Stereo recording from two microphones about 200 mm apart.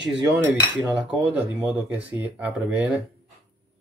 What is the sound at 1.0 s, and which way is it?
Speech, 5° right (ahead or behind).